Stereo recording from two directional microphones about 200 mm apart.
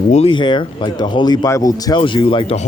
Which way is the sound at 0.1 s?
30° left (ahead or behind).